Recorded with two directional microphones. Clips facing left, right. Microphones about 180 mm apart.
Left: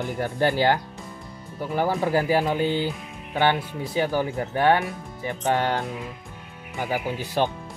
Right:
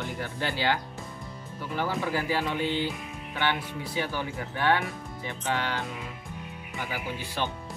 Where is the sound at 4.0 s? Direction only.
45° left (ahead or behind).